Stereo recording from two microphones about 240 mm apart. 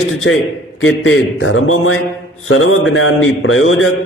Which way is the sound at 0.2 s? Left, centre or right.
Left.